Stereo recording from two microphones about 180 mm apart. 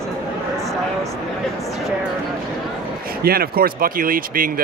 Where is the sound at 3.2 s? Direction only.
55° right (ahead or behind).